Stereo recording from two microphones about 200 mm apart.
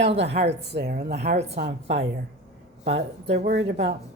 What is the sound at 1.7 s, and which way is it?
Speech, 60° right (ahead or behind).